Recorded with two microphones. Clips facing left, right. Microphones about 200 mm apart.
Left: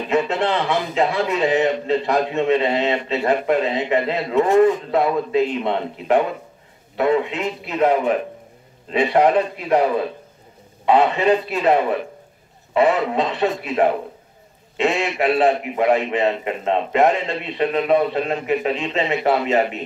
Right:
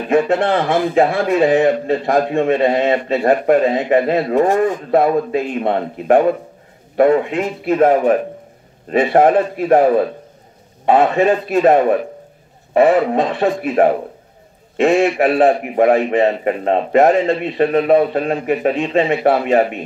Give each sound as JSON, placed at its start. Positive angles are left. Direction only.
{"t": 0.1, "sound": "a man's voice", "side_deg": -50}